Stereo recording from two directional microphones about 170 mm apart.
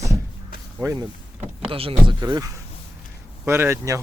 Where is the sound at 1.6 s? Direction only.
30° right (ahead or behind); by 4.0 s 15° right (ahead or behind).